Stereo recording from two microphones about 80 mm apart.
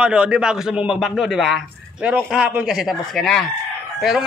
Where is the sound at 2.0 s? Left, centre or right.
Centre.